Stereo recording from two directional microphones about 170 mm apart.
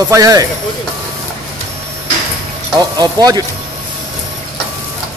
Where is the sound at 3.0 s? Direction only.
25° right (ahead or behind).